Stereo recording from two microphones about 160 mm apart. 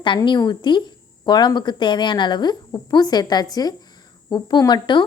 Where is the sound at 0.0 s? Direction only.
30° left (ahead or behind).